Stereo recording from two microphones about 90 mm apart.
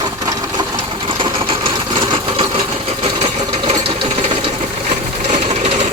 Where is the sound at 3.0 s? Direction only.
90° right.